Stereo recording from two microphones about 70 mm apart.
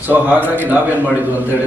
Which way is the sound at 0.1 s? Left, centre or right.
Right.